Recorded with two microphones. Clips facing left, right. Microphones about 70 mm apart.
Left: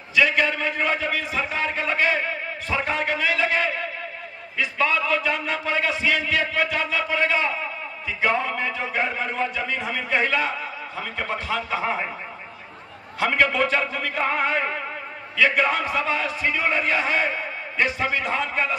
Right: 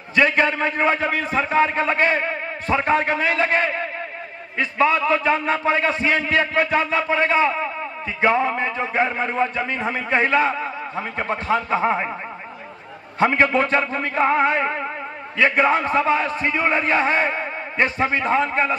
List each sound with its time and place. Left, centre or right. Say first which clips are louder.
0.1 s a man's voice: right 3 dB; right
13.2 s a man's voice: right 3 dB; right